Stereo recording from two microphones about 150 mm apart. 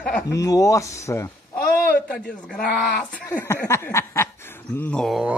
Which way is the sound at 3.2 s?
20° left (ahead or behind).